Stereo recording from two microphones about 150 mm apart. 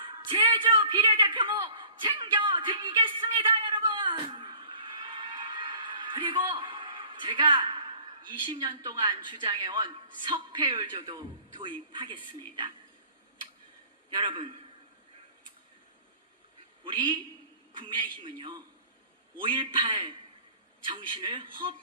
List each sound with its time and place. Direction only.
0.0 s a sound: 35° right (ahead or behind)
11.6 s speech: 35° right (ahead or behind)
14.1 s speech: 35° right (ahead or behind)
16.8 s speech: 30° right (ahead or behind)